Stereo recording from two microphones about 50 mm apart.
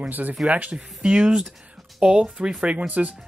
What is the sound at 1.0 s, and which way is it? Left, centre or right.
Speech, centre.